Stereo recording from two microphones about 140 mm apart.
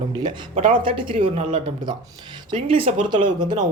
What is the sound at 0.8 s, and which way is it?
Speech, 40° right (ahead or behind).